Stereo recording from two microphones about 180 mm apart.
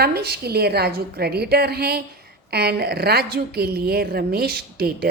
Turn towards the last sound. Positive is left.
turn(degrees=-60)  # may be behind; listen again after turning